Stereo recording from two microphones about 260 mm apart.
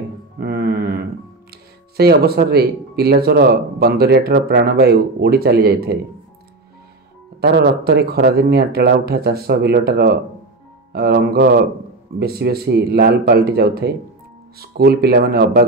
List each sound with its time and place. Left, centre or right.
0.4 s mantra: right
1.5 s speech: right
7.3 s speech: right